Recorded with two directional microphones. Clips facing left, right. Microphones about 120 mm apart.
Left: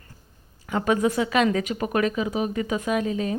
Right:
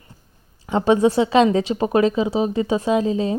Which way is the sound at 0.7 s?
30° right (ahead or behind).